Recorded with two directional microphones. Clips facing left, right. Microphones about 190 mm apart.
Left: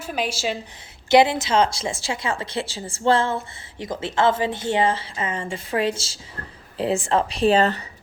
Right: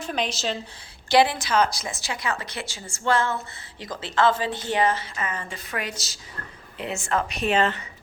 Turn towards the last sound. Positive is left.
turn(degrees=35)  # may be behind; listen again after turning